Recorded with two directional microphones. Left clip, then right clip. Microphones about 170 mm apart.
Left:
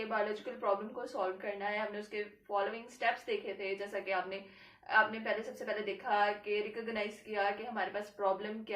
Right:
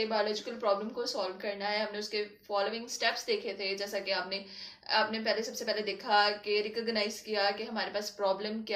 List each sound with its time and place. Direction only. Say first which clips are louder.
0.1 s a woman's voice: right 4 dB; 15° left (ahead or behind)